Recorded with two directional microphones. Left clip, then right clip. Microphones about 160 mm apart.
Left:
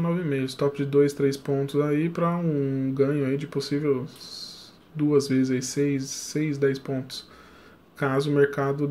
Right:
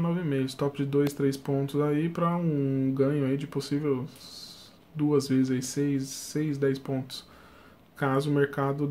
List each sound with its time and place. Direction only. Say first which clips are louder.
0.0 s speech: left 3 dB; 10° right (ahead or behind)